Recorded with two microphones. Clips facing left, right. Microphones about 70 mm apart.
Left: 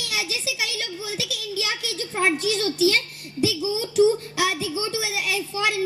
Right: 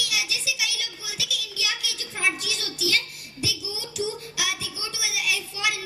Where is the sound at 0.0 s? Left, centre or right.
Left.